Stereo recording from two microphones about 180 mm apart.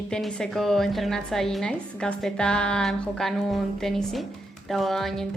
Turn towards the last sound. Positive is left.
turn(degrees=0)  # may be behind; listen again after turning